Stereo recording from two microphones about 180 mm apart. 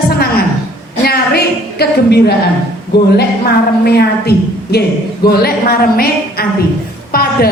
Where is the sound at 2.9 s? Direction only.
65° left (ahead or behind).